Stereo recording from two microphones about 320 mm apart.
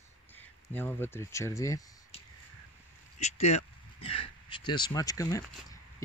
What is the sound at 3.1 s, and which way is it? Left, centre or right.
Speech, left.